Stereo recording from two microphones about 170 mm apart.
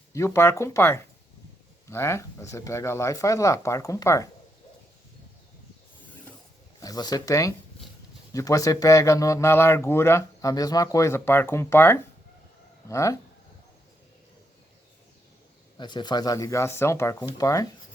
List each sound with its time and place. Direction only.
0.1 s speech: 15° left (ahead or behind)
6.7 s speech: 20° left (ahead or behind)
15.8 s speech: 25° left (ahead or behind)